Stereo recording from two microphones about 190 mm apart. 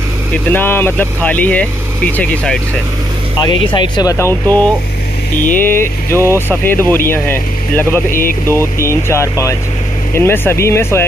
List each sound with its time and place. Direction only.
0.5 s speech: 10° left (ahead or behind)
3.3 s speech: 25° left (ahead or behind)
8.1 s speech: 50° left (ahead or behind)
8.5 s speech: 15° left (ahead or behind)